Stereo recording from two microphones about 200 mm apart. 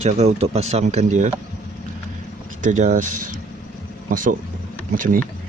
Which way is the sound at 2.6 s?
35° right (ahead or behind).